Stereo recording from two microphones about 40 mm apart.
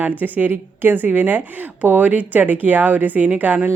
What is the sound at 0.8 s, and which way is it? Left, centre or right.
Speech, right.